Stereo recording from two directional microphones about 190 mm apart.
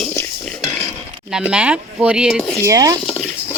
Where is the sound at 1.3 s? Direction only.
5° right (ahead or behind).